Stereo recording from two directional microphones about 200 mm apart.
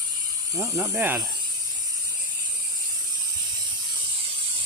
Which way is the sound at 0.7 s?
10° right (ahead or behind).